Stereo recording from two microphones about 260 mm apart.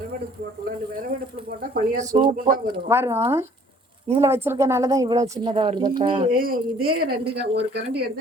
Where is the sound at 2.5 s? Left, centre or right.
Centre.